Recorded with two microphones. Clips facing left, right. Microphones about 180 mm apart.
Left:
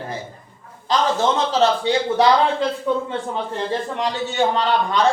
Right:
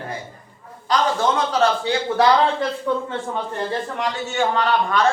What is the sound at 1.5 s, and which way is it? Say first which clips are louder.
Speech: left 2 dB; 20° left (ahead or behind).